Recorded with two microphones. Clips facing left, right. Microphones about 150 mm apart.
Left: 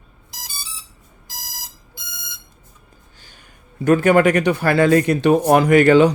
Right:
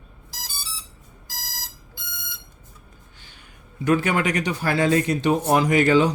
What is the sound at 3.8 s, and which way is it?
Speech, 50° left (ahead or behind).